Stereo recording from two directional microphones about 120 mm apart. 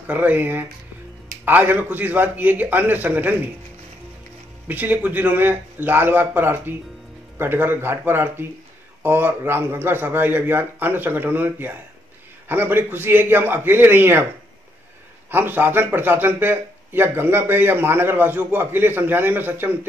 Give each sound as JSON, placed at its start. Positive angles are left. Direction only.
{"t": 0.0, "sound": "a man's voice", "side_deg": -15}
{"t": 4.6, "sound": "a man's voice", "side_deg": -15}
{"t": 15.2, "sound": "a man's voice", "side_deg": -15}